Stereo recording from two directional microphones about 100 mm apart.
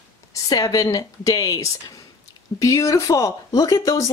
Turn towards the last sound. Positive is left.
turn(degrees=30)  # may be behind; listen again after turning